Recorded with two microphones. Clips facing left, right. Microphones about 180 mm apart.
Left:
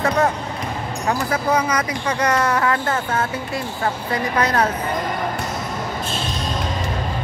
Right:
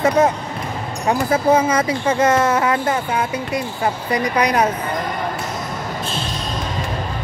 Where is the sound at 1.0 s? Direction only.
25° right (ahead or behind).